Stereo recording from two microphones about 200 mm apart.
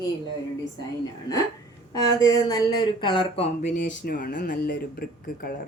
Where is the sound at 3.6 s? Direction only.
40° left (ahead or behind).